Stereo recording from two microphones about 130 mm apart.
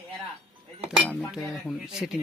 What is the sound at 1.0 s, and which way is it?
A man's voice, 5° right (ahead or behind).